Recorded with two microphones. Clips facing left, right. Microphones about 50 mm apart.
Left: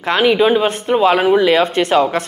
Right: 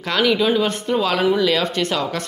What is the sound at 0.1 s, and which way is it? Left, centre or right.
A woman's voice, left.